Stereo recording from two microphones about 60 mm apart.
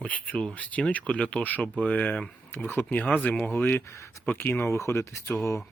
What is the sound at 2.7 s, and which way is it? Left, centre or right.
Speech, left.